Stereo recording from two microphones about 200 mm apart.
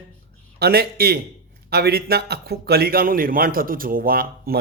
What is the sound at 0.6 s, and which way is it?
Speech, 50° right (ahead or behind).